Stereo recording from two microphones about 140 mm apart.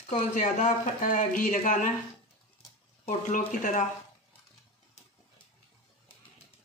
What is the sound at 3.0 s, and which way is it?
Speech, 65° left (ahead or behind).